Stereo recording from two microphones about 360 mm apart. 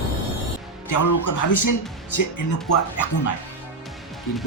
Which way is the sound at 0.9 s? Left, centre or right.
Left.